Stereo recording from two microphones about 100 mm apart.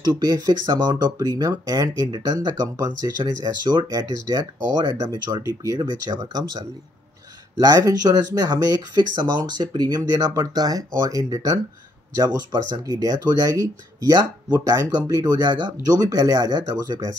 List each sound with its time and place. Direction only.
0.2 s speech: 40° right (ahead or behind)
12.7 s speech: 35° right (ahead or behind)